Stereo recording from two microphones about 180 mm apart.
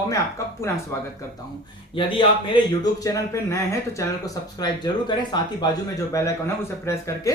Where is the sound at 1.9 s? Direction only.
25° left (ahead or behind).